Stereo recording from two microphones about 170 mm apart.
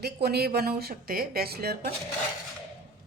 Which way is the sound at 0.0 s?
70° right (ahead or behind).